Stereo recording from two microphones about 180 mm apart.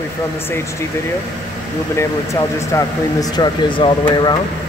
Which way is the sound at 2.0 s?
15° left (ahead or behind).